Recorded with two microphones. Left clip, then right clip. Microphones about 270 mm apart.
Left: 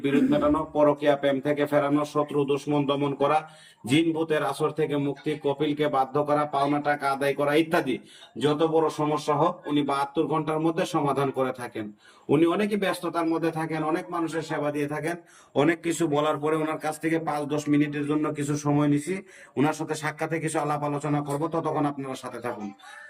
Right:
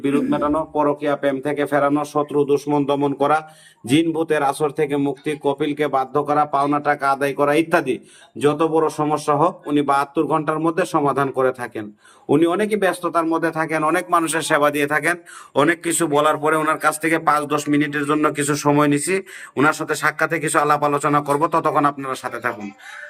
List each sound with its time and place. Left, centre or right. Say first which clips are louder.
0.0 s a man's voice: right 3 dB; centre
13.6 s a man's voice: right 9 dB; right
15.5 s speech: right 6 dB; centre
18.1 s a man's voice: right 9 dB; right
19.5 s speech: right 8 dB; centre